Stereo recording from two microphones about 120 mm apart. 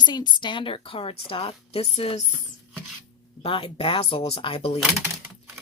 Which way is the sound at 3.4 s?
50° left (ahead or behind).